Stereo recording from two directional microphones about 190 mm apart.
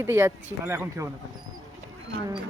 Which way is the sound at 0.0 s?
15° right (ahead or behind).